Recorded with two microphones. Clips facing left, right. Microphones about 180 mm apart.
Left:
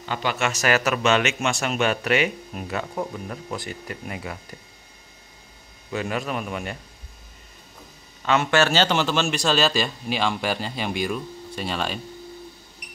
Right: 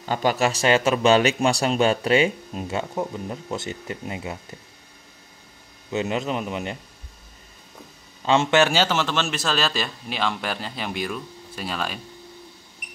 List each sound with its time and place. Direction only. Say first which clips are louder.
0.0 s speech: right 4 dB; 40° right (ahead or behind); by 4.6 s 25° right (ahead or behind)
5.9 s speech: right 2 dB; 25° right (ahead or behind)
8.3 s a man's voice: right 2 dB; 25° right (ahead or behind); by 12.0 s centre (ahead or behind)